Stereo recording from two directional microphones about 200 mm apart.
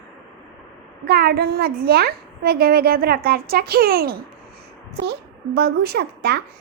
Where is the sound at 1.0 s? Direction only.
50° right (ahead or behind).